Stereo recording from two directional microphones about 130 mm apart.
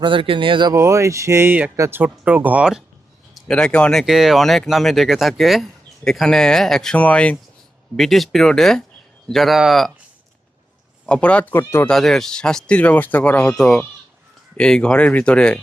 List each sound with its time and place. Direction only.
0.0 s speech: 40° right (ahead or behind)
0.7 s speech: 20° right (ahead or behind); by 2.8 s 5° right (ahead or behind)
3.3 s speech: 5° left (ahead or behind)
4.0 s speech: 5° right (ahead or behind)
11.0 s speech: 10° left (ahead or behind)